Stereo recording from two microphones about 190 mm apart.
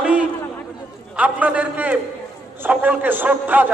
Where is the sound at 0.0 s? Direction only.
5° right (ahead or behind).